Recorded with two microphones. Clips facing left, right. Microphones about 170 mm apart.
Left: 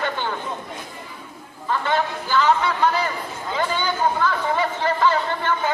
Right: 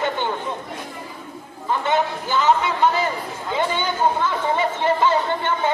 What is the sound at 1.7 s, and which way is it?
Speech, 20° right (ahead or behind).